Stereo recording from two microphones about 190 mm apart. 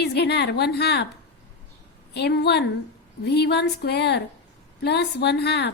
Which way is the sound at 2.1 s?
60° left (ahead or behind).